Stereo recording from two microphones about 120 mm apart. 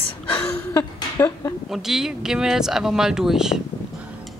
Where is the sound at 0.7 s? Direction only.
25° left (ahead or behind).